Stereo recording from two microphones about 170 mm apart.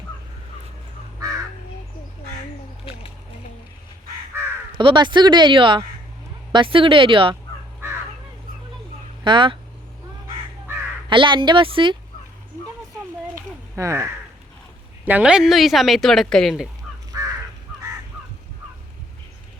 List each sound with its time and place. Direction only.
4.8 s speech: 30° right (ahead or behind)
9.2 s speech: 30° right (ahead or behind)
11.1 s speech: 30° right (ahead or behind)
13.3 s a sound: 15° right (ahead or behind)
15.0 s speech: 10° right (ahead or behind)
17.1 s crow: 20° right (ahead or behind)